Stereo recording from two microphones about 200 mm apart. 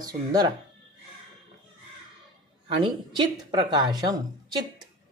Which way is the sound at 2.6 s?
25° right (ahead or behind).